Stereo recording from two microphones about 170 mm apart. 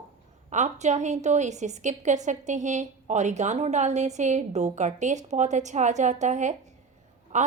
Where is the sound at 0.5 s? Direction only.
45° right (ahead or behind).